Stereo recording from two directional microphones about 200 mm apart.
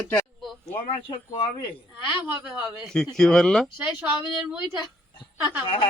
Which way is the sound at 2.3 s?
5° right (ahead or behind).